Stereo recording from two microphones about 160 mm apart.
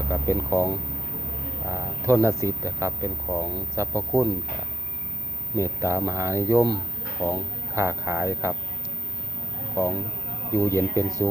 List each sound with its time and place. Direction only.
0.1 s speech: 20° right (ahead or behind)
1.7 s speech: 20° right (ahead or behind)
5.5 s speech: 20° right (ahead or behind)
9.8 s speech: 20° right (ahead or behind)